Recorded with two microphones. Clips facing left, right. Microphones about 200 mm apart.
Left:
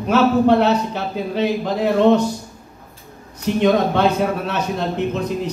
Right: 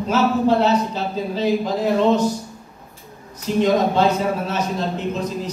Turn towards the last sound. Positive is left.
turn(degrees=65)  # may be behind; listen again after turning